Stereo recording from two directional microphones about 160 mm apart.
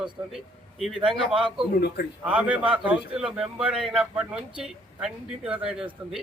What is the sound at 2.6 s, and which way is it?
Speech, 30° right (ahead or behind).